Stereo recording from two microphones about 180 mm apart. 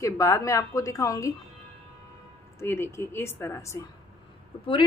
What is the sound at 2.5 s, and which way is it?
Speech, 15° left (ahead or behind).